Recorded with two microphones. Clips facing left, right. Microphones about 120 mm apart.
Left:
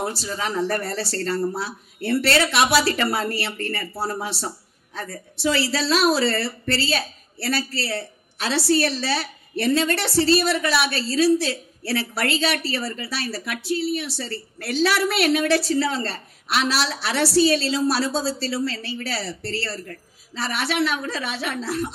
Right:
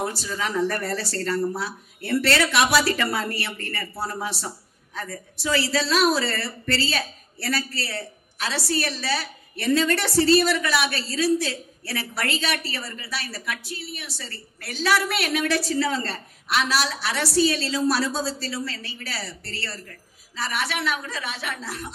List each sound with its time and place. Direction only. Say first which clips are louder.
0.0 s a woman's voice: left 1 dB; 30° left (ahead or behind)